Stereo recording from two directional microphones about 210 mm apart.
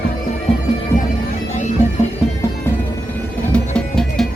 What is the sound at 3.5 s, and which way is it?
Music, 5° left (ahead or behind).